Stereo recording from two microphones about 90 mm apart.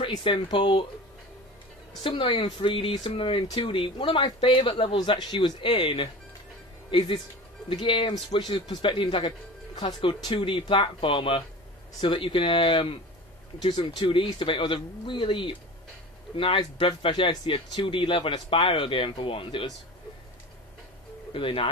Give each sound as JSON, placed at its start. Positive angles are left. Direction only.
{"t": 0.2, "sound": "speech", "side_deg": 70}
{"t": 2.0, "sound": "speech", "side_deg": 70}
{"t": 3.6, "sound": "speech", "side_deg": 70}
{"t": 5.6, "sound": "speech", "side_deg": 75}
{"t": 13.6, "sound": "speech", "side_deg": 55}
{"t": 14.0, "sound": "speech", "side_deg": 70}
{"t": 17.1, "sound": "speech", "side_deg": 55}
{"t": 17.5, "sound": "speech", "side_deg": 70}
{"t": 21.3, "sound": "speech", "side_deg": 75}